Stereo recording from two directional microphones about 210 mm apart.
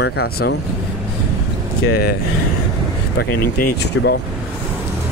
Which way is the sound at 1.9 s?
45° left (ahead or behind).